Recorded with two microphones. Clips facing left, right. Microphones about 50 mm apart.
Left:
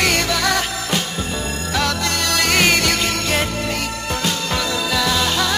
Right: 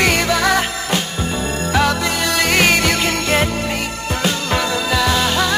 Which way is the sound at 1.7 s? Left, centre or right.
Centre.